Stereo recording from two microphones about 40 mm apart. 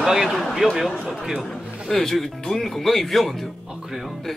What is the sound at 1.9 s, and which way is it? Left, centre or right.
Speech, centre.